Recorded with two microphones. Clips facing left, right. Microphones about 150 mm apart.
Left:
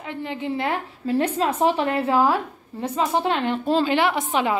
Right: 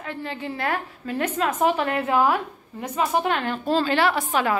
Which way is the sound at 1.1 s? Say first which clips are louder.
Left 3 dB; 35° left (ahead or behind).